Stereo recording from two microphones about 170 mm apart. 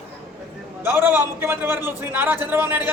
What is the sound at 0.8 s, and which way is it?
A man's voice, 10° right (ahead or behind).